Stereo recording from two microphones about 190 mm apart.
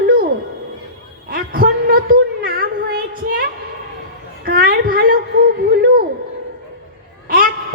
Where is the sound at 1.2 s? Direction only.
50° right (ahead or behind).